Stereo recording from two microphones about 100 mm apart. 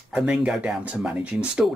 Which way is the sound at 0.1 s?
10° right (ahead or behind).